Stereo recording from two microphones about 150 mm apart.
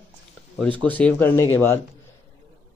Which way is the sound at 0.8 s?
10° left (ahead or behind).